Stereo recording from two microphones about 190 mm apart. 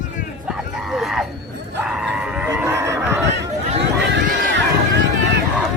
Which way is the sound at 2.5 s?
15° right (ahead or behind).